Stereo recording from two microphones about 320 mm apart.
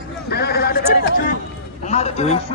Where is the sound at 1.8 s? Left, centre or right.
Centre.